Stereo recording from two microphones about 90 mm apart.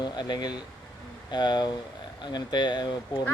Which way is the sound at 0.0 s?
50° left (ahead or behind).